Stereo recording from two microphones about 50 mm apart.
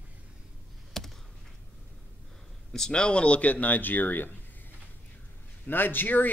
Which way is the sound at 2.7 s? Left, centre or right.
Centre.